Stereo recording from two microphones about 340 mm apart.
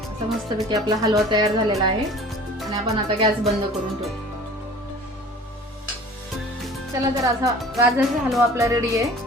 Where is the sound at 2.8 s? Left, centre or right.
Centre.